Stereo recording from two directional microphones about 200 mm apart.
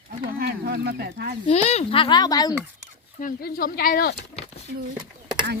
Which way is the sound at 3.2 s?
45° left (ahead or behind).